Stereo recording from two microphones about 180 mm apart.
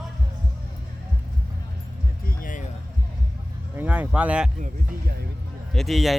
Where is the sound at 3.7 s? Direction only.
10° right (ahead or behind).